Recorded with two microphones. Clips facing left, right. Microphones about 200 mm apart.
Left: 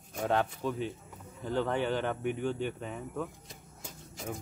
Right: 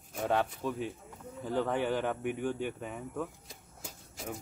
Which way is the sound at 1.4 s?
5° right (ahead or behind).